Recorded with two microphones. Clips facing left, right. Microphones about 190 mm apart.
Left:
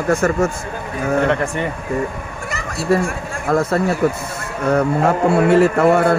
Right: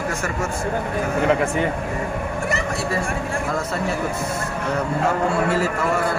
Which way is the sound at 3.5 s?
55° left (ahead or behind).